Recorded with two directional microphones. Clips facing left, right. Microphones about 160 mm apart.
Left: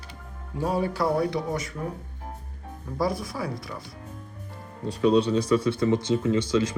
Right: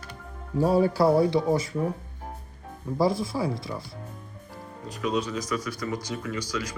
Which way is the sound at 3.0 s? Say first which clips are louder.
Right 3 dB; 25° right (ahead or behind).